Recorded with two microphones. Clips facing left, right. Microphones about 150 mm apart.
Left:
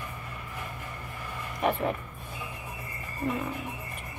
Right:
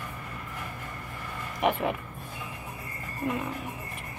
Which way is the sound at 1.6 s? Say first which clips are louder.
Right 1 dB; 15° right (ahead or behind).